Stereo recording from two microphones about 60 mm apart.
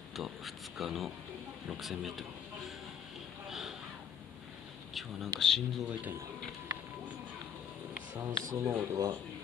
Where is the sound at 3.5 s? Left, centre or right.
Centre.